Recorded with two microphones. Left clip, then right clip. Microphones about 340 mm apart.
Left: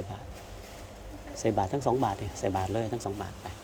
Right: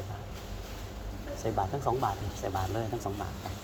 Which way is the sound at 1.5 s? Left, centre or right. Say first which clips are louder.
Left 2 dB; left.